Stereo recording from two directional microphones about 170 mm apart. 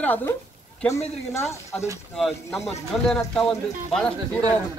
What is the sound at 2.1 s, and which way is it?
Speech, centre (ahead or behind).